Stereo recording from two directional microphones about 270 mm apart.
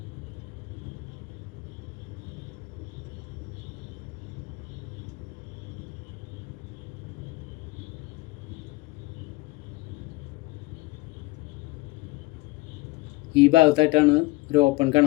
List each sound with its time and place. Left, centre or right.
13.3 s speech: centre